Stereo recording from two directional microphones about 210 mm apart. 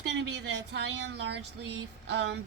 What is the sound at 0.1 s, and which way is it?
A woman's voice, 55° right (ahead or behind).